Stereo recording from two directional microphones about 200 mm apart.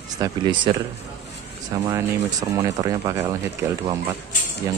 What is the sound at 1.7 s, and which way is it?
Speech, 15° right (ahead or behind).